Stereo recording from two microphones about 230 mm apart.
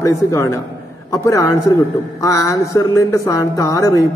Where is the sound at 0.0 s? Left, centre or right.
Centre.